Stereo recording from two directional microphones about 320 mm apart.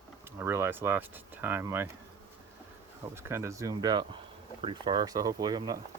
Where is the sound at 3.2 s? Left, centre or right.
Centre.